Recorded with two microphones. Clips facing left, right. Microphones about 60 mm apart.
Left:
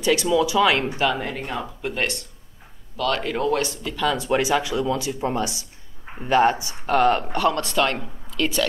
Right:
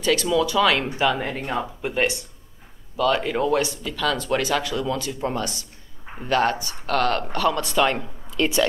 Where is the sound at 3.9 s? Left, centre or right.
Centre.